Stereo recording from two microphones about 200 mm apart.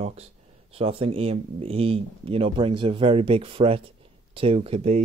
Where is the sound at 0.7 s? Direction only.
30° right (ahead or behind).